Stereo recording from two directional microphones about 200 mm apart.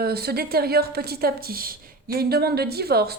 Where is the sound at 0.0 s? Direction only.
50° right (ahead or behind).